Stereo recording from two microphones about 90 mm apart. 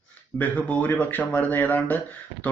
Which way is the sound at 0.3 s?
20° left (ahead or behind).